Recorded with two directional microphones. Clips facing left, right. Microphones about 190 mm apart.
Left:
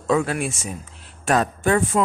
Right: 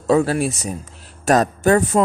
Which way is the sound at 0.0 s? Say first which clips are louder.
Right 5 dB; 35° right (ahead or behind).